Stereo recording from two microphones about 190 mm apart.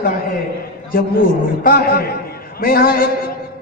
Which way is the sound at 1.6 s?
50° left (ahead or behind).